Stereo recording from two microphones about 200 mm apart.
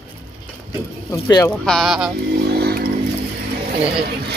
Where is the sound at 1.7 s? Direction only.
Centre (ahead or behind).